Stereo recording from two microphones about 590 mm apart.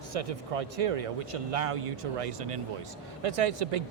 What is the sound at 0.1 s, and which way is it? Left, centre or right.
A man's voice, right.